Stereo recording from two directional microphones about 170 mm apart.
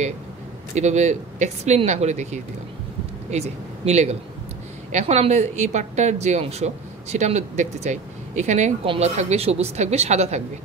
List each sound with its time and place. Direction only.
0.7 s a man's voice: 40° right (ahead or behind)